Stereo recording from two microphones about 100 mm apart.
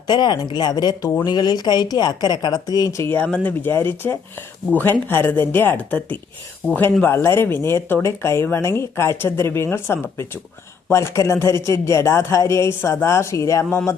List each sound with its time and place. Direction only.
0.1 s speech: 45° left (ahead or behind)
3.2 s speech: 10° left (ahead or behind)
3.6 s speech: 25° left (ahead or behind)